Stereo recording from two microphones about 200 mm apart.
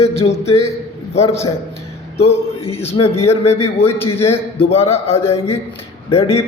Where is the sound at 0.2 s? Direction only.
30° left (ahead or behind).